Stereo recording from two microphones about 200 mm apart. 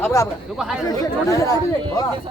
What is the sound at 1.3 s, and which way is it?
Speech, 15° left (ahead or behind).